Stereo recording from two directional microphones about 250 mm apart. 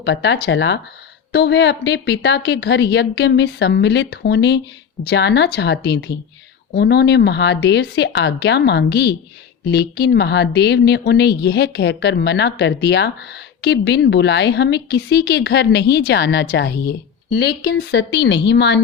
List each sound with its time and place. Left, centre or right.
0.0 s a woman's voice: left